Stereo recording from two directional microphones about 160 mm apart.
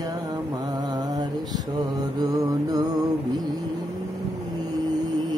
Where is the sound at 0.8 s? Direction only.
25° right (ahead or behind).